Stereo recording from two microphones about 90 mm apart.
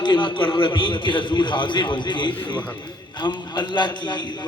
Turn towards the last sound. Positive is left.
turn(degrees=55)  # may be behind; listen again after turning